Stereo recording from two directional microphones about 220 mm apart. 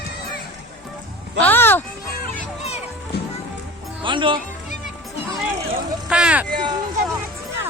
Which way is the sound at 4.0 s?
20° right (ahead or behind).